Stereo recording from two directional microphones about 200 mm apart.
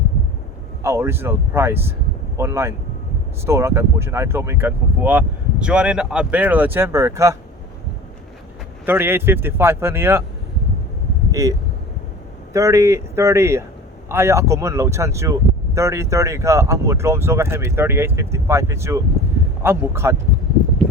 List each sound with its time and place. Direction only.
0.8 s speech: 15° right (ahead or behind)
8.9 s speech: 10° right (ahead or behind)
11.3 s speech: 15° right (ahead or behind)
12.5 s speech: 15° right (ahead or behind)